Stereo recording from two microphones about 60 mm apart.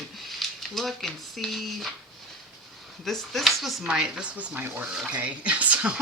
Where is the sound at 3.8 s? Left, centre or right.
Centre; by 4.9 s right.